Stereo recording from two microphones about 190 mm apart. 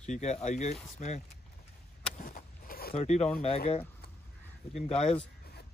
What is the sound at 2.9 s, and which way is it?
Speech, 35° left (ahead or behind).